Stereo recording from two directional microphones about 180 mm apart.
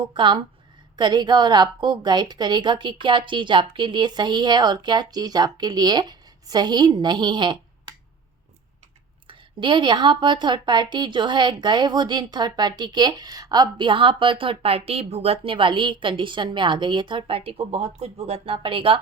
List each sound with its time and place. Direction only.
0.0 s a woman's voice: 25° right (ahead or behind)
9.2 s a woman's voice: 25° right (ahead or behind)